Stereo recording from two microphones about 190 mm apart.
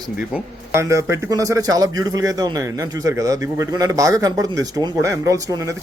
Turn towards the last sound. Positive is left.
turn(degrees=-20)  # may be behind; listen again after turning